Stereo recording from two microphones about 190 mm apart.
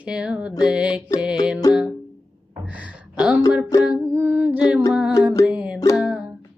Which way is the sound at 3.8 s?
10° right (ahead or behind).